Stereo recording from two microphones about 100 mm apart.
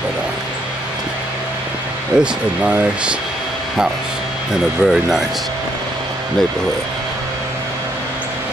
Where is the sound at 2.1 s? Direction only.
5° right (ahead or behind).